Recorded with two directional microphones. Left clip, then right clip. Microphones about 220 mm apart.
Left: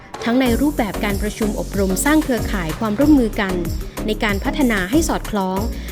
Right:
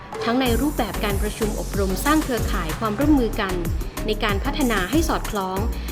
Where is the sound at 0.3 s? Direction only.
40° left (ahead or behind).